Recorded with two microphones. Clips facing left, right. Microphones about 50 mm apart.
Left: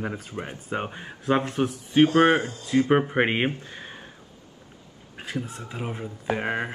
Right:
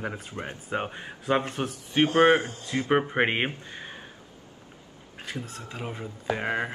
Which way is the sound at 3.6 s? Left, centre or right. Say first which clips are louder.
Even; centre.